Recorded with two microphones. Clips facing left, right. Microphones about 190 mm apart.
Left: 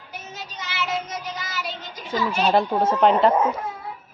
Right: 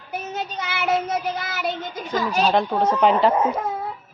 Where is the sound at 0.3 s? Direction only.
55° right (ahead or behind).